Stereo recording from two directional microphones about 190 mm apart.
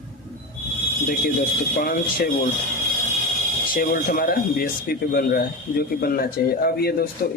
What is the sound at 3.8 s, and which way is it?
Speech, 50° left (ahead or behind).